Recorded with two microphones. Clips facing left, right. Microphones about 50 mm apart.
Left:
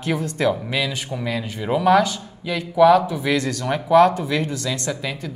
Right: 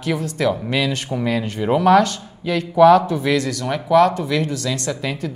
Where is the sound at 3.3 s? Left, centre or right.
Left.